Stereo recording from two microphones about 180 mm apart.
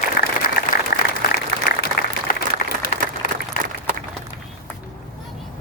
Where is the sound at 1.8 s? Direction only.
55° left (ahead or behind).